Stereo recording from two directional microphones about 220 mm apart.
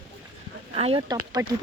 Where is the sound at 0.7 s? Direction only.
25° right (ahead or behind).